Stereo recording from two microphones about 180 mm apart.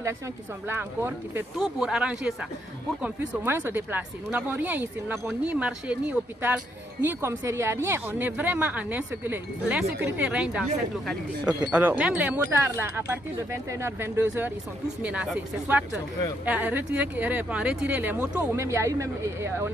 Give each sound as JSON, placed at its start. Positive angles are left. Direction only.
{"t": 0.7, "sound": "a woman's voice", "side_deg": -15}
{"t": 11.7, "sound": "a woman's voice", "side_deg": -5}